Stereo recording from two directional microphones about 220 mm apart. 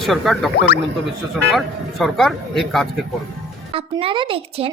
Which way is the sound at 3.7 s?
25° right (ahead or behind).